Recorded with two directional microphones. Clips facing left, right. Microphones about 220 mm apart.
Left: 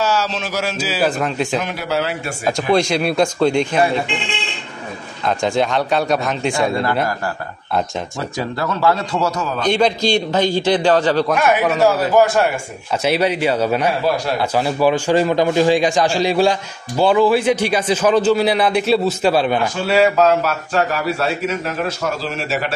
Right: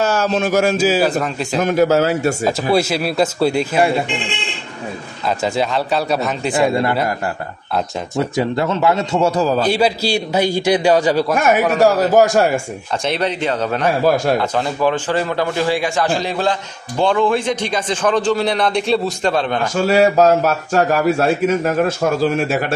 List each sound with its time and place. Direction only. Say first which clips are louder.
0.0 s a man's voice: right 3 dB; 50° right (ahead or behind)
1.2 s speech: left 2 dB; centre (ahead or behind)
1.6 s a man's voice: right 8 dB; 45° right (ahead or behind)
2.7 s speech: left 3 dB; 5° right (ahead or behind)
5.2 s speech: left 1 dB; 5° right (ahead or behind)
6.5 s a man's voice: right 5 dB; 20° right (ahead or behind)
8.4 s a man's voice: right 2 dB; 20° right (ahead or behind)
9.7 s a man's voice: left 1 dB; 5° right (ahead or behind)
11.3 s a man's voice: right 1 dB; 45° right (ahead or behind)
13.0 s a man's voice: left 3 dB; 10° left (ahead or behind)
19.8 s a man's voice: right 3 dB; 40° right (ahead or behind)